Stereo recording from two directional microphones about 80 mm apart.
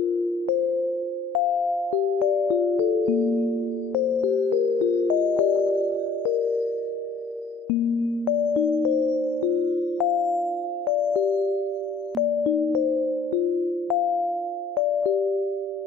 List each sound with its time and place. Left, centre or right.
4.5 s music: right
5.3 s music: centre
8.8 s electric piano: centre
9.9 s music: centre